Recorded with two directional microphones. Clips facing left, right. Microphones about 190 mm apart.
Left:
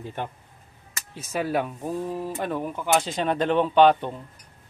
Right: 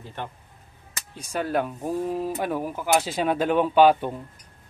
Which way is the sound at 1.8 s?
15° right (ahead or behind).